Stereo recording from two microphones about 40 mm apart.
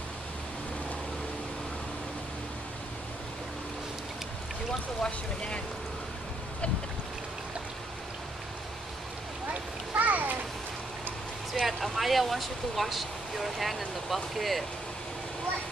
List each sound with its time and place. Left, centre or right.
5.0 s speech: left
9.5 s children playing: right
11.5 s speech: centre